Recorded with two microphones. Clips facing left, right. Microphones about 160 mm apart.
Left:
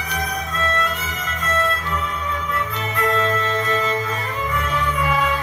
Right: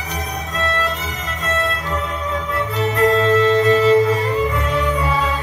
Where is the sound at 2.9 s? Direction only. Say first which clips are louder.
Right 6 dB; 35° right (ahead or behind).